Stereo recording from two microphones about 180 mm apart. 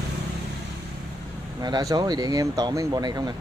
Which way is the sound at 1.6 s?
20° right (ahead or behind).